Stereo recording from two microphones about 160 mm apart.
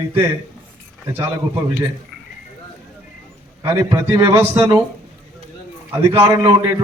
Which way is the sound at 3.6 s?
20° right (ahead or behind).